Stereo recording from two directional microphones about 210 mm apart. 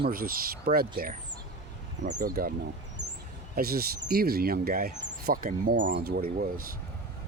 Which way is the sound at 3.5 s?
45° right (ahead or behind).